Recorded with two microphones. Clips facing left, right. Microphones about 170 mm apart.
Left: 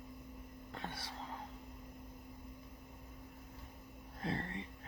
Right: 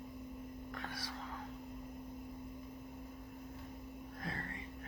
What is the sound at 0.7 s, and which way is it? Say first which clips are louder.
Whispering: left 2 dB; 25° left (ahead or behind).